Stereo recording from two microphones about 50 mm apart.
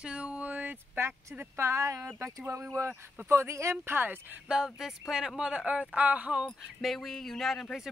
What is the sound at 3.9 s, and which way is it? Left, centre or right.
Speech, right.